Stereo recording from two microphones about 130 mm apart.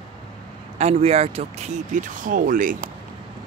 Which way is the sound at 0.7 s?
55° right (ahead or behind).